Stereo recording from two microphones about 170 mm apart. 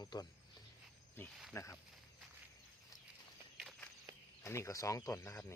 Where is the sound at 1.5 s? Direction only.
15° left (ahead or behind).